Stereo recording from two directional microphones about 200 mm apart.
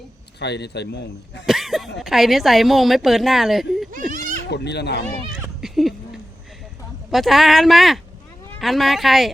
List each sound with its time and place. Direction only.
0.3 s speech: 55° left (ahead or behind)
1.5 s a woman's voice: centre (ahead or behind)
4.1 s a sound: 40° right (ahead or behind)
4.4 s speech: 55° left (ahead or behind)
5.6 s a sound: centre (ahead or behind)
7.1 s a woman's voice: centre (ahead or behind)